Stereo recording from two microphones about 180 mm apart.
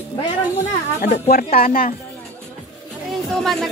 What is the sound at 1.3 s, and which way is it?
Speech, 55° left (ahead or behind).